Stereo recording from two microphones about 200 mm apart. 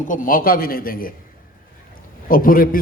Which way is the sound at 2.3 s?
45° left (ahead or behind).